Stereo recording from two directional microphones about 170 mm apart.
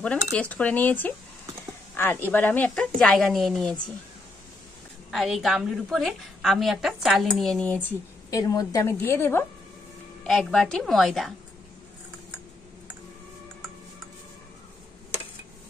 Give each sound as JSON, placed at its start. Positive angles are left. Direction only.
{"t": 0.0, "sound": "a woman's voice", "side_deg": 5}
{"t": 5.1, "sound": "a woman's voice", "side_deg": 0}
{"t": 8.3, "sound": "speech", "side_deg": 20}
{"t": 10.2, "sound": "a woman's voice", "side_deg": 5}